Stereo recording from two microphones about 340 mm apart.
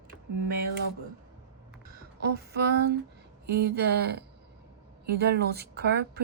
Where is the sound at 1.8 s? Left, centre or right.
Right.